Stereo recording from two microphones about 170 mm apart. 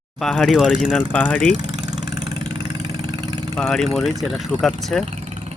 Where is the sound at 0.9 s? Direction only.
10° left (ahead or behind).